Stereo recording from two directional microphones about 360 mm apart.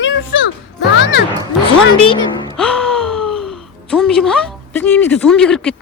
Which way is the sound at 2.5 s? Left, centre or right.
Centre.